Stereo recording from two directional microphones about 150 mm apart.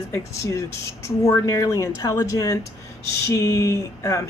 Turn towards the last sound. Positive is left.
turn(degrees=20)  # may be behind; listen again after turning